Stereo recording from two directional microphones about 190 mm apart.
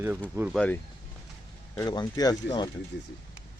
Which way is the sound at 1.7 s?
20° left (ahead or behind).